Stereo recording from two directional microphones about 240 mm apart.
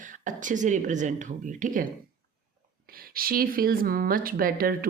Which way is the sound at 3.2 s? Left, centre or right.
Right.